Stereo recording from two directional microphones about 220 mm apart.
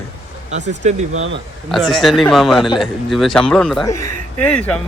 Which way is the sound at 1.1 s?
65° right (ahead or behind).